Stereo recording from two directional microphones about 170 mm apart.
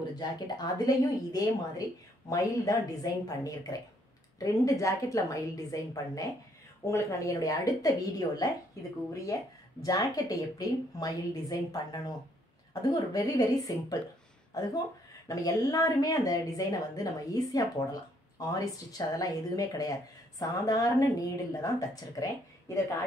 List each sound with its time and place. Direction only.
0.1 s speech: 25° left (ahead or behind)
9.8 s speech: 20° left (ahead or behind)